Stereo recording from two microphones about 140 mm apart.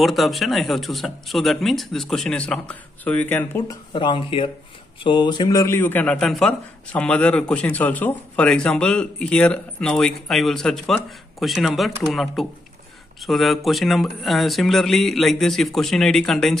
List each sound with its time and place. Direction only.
0.0 s speech: centre (ahead or behind)
3.6 s a man's voice: 35° left (ahead or behind); by 16.5 s 5° left (ahead or behind)